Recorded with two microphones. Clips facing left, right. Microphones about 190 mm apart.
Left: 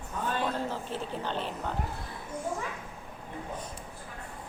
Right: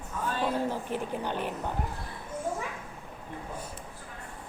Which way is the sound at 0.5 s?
15° right (ahead or behind).